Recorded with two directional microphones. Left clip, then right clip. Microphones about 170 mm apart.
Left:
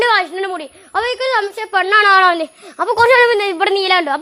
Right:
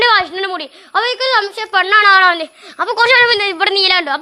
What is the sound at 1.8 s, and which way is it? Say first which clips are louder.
A woman's voice: right 1 dB; 40° left (ahead or behind).